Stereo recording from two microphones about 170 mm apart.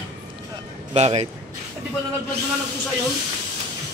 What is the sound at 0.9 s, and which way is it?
Speech, 40° right (ahead or behind).